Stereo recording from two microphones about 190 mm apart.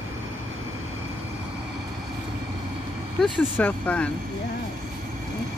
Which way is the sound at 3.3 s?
10° left (ahead or behind).